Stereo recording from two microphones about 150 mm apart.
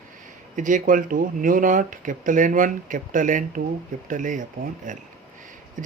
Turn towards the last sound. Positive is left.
turn(degrees=-60)  # may be behind; listen again after turning